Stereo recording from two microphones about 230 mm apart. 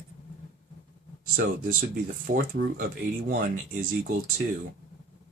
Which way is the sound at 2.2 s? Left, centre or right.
Right.